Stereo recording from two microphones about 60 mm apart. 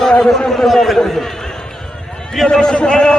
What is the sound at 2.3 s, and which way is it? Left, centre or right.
Speech, centre.